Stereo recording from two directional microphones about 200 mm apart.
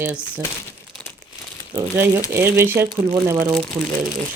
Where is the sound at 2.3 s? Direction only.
10° right (ahead or behind).